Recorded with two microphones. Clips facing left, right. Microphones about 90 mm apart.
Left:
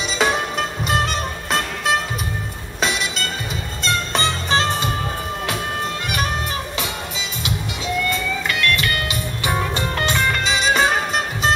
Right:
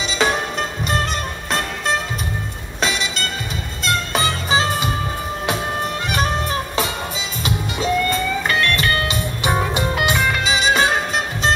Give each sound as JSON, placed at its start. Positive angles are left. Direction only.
{"t": 0.0, "sound": "music", "side_deg": 0}
{"t": 7.4, "sound": "music", "side_deg": -40}
{"t": 9.4, "sound": "music", "side_deg": -20}